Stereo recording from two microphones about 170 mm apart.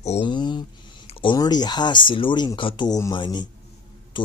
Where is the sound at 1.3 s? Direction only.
25° left (ahead or behind).